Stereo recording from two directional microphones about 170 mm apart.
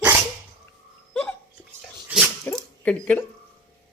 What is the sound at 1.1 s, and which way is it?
Hiccup, 5° left (ahead or behind).